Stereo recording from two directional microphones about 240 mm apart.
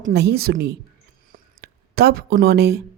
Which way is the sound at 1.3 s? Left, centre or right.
Right.